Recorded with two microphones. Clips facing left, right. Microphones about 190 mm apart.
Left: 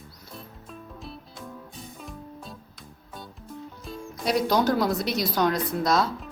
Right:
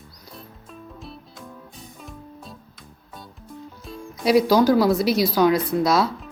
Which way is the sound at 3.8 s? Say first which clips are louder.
Right 7 dB; centre (ahead or behind).